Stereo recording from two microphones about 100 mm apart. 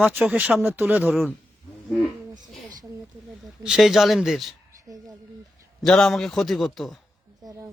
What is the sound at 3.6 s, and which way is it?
Speech, 5° right (ahead or behind).